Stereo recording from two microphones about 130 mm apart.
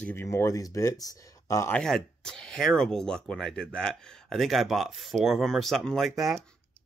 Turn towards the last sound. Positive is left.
turn(degrees=0)  # may be behind; listen again after turning